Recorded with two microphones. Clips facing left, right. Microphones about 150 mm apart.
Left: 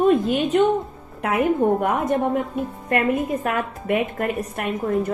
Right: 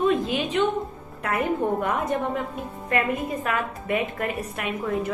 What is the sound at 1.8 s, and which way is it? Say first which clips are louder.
A woman's voice: left 4 dB; 50° left (ahead or behind).